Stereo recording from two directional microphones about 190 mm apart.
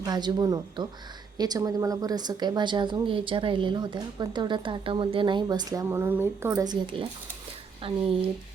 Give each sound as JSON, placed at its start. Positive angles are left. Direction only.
{"t": 0.0, "sound": "a woman's voice", "side_deg": -20}